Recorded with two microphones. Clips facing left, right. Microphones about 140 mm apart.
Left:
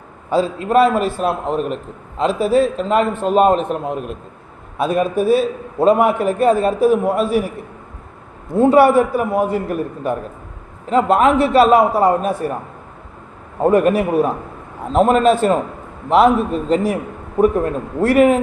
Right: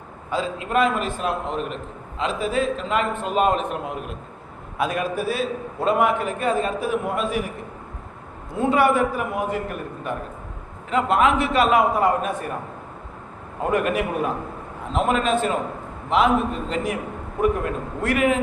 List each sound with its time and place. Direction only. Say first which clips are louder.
0.3 s a man's voice: left 8 dB; 35° left (ahead or behind)
4.8 s a man's voice: left 7 dB; 30° left (ahead or behind)
5.1 s a man's voice: left 10 dB; centre (ahead or behind)
5.8 s a man's voice: left 7 dB; 35° left (ahead or behind)
8.5 s a man's voice: left 8 dB; 35° left (ahead or behind)
13.6 s a man's voice: left 8 dB; 35° left (ahead or behind)